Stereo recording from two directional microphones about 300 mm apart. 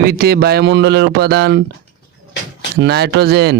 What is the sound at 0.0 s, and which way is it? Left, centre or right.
Speech, right.